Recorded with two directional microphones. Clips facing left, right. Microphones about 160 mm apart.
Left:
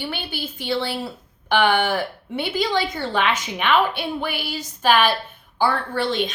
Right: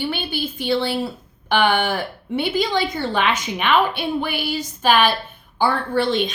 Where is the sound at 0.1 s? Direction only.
20° right (ahead or behind).